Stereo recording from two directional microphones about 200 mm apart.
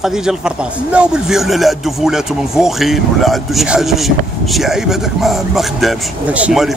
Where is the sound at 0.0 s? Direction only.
Centre (ahead or behind).